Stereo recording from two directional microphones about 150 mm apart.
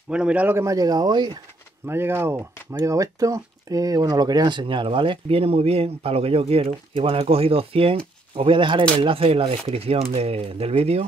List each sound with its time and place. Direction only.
0.1 s speech: 10° right (ahead or behind); by 1.4 s 30° right (ahead or behind)
1.9 s speech: 15° right (ahead or behind); by 11.1 s 40° right (ahead or behind)